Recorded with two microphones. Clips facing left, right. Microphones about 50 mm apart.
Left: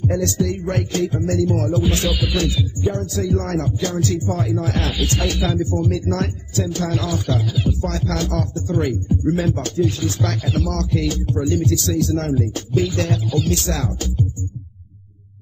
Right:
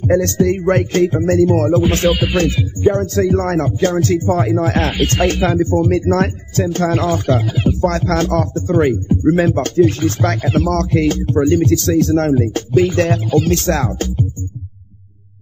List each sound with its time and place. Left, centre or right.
0.0 s speech: right